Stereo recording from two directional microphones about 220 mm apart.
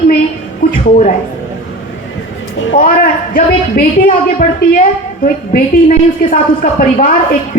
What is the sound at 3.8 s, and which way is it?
Speech, 45° left (ahead or behind).